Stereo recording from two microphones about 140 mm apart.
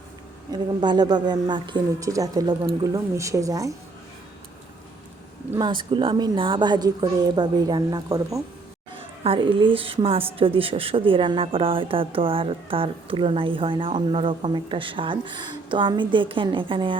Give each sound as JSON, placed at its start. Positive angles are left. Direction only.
{"t": 0.5, "sound": "speech", "side_deg": -30}
{"t": 5.5, "sound": "speech", "side_deg": -35}
{"t": 9.2, "sound": "speech", "side_deg": -40}